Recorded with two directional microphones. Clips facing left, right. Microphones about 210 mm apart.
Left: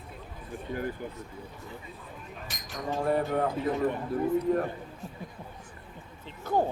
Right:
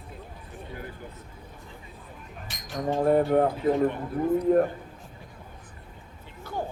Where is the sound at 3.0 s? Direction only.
50° right (ahead or behind).